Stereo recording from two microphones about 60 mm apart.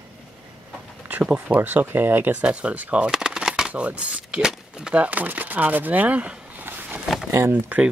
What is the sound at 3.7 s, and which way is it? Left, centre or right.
Speech, right.